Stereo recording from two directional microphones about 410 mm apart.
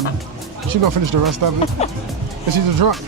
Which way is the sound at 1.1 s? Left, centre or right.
Right.